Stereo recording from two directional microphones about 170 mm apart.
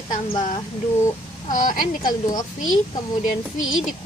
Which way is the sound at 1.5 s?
50° left (ahead or behind).